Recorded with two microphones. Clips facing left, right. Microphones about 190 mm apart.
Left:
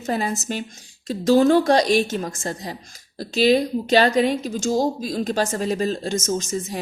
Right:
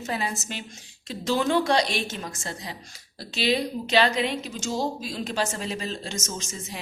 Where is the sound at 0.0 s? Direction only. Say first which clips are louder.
Left 6 dB; 45° left (ahead or behind).